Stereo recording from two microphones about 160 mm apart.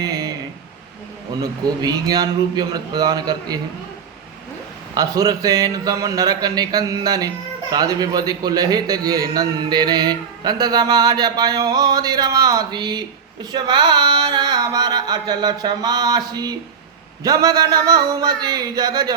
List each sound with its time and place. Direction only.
0.0 s a sound: 25° right (ahead or behind)
1.4 s a man's voice: 25° right (ahead or behind)
4.9 s a man's voice: 25° right (ahead or behind)